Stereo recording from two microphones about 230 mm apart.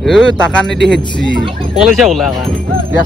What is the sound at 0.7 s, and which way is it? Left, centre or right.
Speech, right.